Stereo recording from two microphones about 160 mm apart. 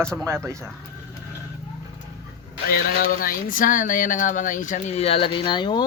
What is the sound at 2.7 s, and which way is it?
Speech, 60° left (ahead or behind).